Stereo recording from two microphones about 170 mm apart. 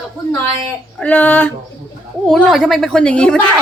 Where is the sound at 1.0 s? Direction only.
10° left (ahead or behind).